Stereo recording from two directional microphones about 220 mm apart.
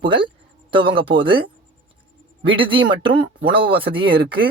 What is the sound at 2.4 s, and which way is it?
A woman's voice, 25° right (ahead or behind).